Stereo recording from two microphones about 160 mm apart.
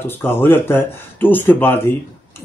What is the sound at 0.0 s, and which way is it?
Speech, 15° left (ahead or behind).